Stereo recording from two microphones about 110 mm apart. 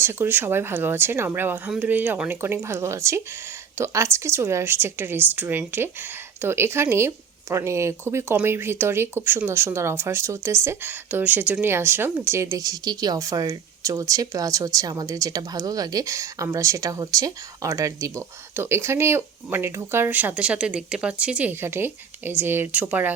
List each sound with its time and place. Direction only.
0.0 s speech: 20° right (ahead or behind)